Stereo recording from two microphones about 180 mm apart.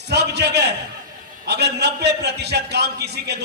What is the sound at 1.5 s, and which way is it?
A man's voice, 65° right (ahead or behind).